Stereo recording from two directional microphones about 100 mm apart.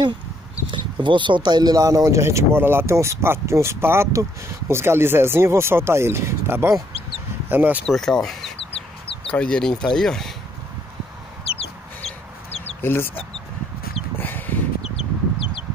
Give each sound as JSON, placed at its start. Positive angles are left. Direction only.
{"t": 0.7, "sound": "speech", "side_deg": -55}
{"t": 7.8, "sound": "speech", "side_deg": 5}
{"t": 11.5, "sound": "chicken", "side_deg": 90}
{"t": 12.8, "sound": "speech", "side_deg": 25}
{"t": 14.1, "sound": "a sound", "side_deg": 20}
{"t": 14.8, "sound": "chicken", "side_deg": 70}